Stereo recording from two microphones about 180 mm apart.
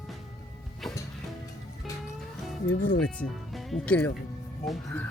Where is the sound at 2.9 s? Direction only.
Centre (ahead or behind).